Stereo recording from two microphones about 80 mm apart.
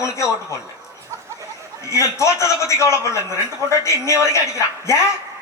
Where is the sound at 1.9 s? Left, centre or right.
Left.